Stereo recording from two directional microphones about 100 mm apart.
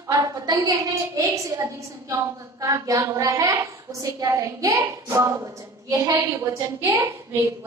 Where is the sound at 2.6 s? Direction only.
35° right (ahead or behind).